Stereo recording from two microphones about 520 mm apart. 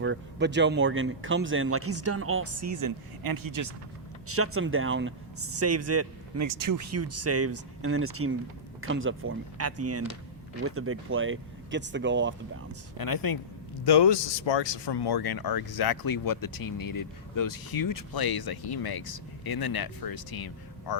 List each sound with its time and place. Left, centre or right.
0.0 s speech: right
4.3 s speech: right
13.0 s speech: left